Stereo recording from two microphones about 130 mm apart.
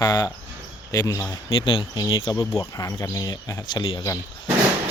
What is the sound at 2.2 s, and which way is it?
Speech, 25° left (ahead or behind).